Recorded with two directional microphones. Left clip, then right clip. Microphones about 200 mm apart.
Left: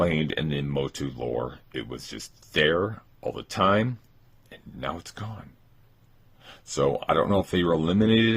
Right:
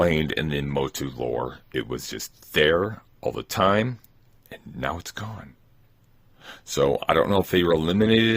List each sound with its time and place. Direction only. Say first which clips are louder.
0.0 s speech: right 3 dB; 40° right (ahead or behind)